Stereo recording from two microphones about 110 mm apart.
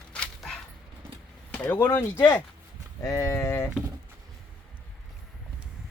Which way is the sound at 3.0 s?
30° left (ahead or behind).